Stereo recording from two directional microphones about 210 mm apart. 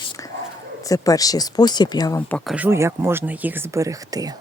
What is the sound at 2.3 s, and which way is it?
Speech, 5° right (ahead or behind).